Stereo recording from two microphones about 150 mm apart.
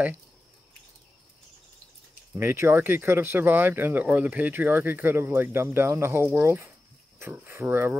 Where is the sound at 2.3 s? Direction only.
15° right (ahead or behind).